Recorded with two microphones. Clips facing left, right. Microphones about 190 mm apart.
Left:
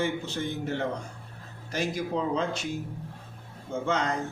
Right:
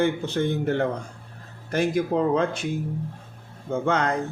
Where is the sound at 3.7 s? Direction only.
60° right (ahead or behind).